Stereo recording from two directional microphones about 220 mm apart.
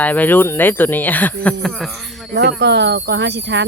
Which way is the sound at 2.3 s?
50° right (ahead or behind).